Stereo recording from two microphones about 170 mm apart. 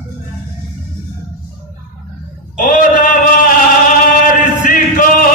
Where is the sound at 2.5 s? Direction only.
55° left (ahead or behind).